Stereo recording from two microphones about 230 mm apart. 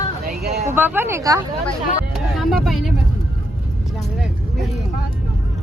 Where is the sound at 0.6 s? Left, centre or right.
Centre.